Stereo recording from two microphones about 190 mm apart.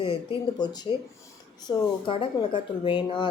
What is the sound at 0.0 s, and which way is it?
Speech, 25° left (ahead or behind).